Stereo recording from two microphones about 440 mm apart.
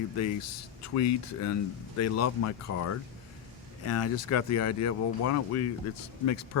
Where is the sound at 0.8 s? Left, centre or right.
Left.